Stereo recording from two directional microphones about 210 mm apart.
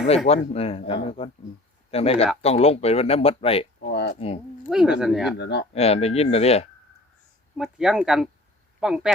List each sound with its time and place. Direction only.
0.3 s speech: 30° left (ahead or behind)
4.7 s speech: 5° right (ahead or behind)
5.4 s speech: 55° left (ahead or behind)
5.7 s speech: 30° left (ahead or behind)
7.5 s speech: centre (ahead or behind)